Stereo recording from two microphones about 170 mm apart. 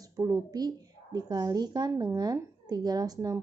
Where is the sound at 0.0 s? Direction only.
20° right (ahead or behind).